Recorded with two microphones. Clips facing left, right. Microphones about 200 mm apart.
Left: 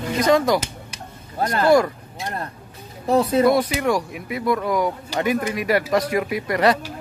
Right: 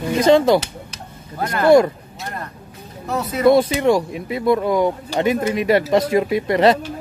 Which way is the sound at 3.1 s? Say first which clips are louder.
Left 6 dB; 30° left (ahead or behind).